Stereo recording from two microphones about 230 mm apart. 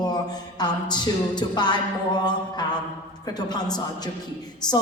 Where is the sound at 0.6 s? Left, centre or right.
Centre.